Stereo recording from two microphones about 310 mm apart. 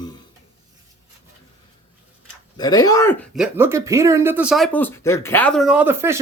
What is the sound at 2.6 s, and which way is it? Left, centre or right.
Speech, centre.